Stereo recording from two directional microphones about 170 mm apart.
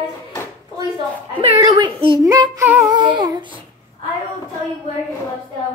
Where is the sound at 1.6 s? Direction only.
25° right (ahead or behind).